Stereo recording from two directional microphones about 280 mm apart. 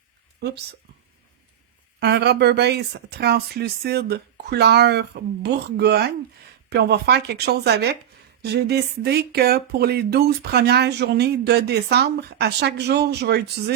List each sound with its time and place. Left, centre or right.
2.0 s speech: right